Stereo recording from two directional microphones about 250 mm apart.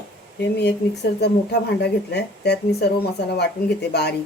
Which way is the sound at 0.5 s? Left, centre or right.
Left.